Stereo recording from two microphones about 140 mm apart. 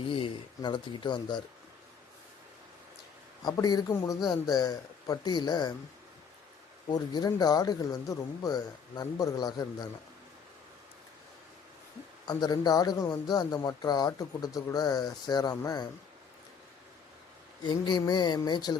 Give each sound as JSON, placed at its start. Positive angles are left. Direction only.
{"t": 0.1, "sound": "speech", "side_deg": 35}
{"t": 3.4, "sound": "speech", "side_deg": 30}
{"t": 6.8, "sound": "speech", "side_deg": 30}
{"t": 12.3, "sound": "speech", "side_deg": 30}
{"t": 17.6, "sound": "speech", "side_deg": 30}